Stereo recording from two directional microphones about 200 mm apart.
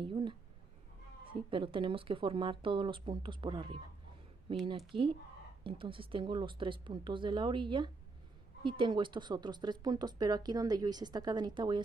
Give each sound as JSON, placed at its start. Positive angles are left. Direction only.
{"t": 0.0, "sound": "speech", "side_deg": -25}